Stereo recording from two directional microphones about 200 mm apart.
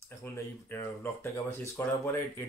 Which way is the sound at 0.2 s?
10° left (ahead or behind).